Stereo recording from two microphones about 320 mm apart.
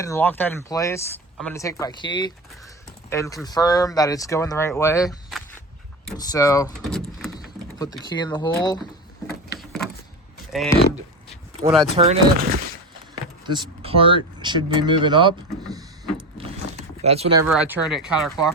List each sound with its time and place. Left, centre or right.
0.0 s speech: centre
7.8 s speech: centre
9.6 s a sound: centre
10.5 s speech: centre
11.9 s speech: right
16.6 s a sound: right
17.0 s speech: centre
17.7 s speech: centre